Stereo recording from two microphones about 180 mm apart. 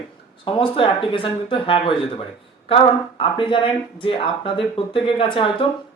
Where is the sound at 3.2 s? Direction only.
30° left (ahead or behind).